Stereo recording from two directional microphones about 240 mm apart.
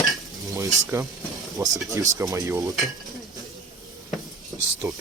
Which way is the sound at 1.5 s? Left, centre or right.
Centre.